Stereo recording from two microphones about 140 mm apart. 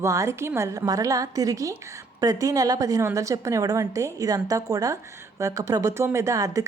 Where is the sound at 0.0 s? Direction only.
20° right (ahead or behind).